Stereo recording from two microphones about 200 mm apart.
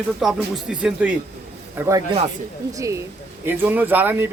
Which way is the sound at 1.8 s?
15° right (ahead or behind).